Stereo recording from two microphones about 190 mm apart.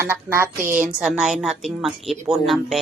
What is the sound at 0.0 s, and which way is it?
A woman's voice, 15° right (ahead or behind).